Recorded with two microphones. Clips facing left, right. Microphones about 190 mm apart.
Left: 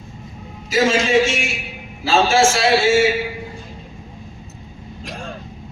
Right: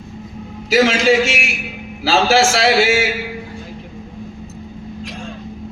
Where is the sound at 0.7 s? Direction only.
70° right (ahead or behind).